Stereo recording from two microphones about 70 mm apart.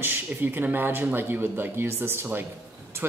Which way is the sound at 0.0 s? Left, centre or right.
Right.